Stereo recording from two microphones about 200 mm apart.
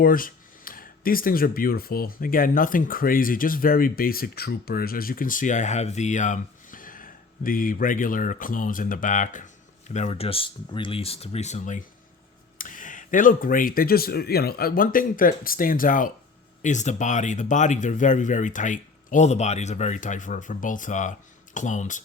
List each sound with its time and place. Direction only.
0.0 s speech: 45° left (ahead or behind)